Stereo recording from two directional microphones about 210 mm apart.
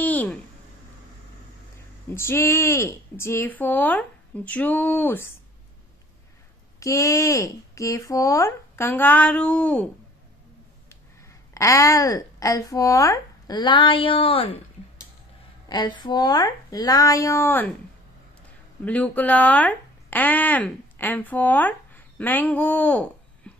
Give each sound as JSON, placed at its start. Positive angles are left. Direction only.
{"t": 0.0, "sound": "a sound", "side_deg": 10}
{"t": 2.1, "sound": "speech", "side_deg": 10}
{"t": 6.8, "sound": "speech", "side_deg": 15}
{"t": 11.5, "sound": "speech", "side_deg": 15}
{"t": 15.7, "sound": "speech", "side_deg": 20}
{"t": 18.9, "sound": "speech", "side_deg": 5}